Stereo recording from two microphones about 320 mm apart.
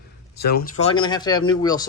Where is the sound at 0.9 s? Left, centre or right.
Centre.